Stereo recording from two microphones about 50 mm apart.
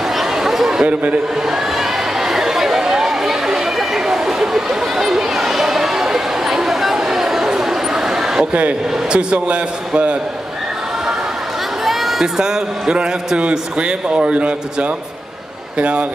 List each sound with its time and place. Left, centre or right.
0.1 s chatter: centre
0.8 s a man's voice: right
1.5 s a sound: centre
8.5 s a man's voice: right
11.8 s a sound: centre
12.4 s a man's voice: centre